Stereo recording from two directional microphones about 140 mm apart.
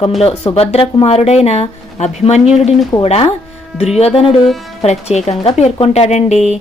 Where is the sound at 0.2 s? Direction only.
45° left (ahead or behind).